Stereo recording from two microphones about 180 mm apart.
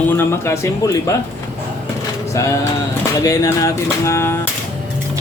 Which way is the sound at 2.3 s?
15° left (ahead or behind).